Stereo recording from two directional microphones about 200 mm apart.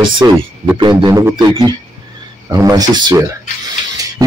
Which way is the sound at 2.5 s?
15° right (ahead or behind).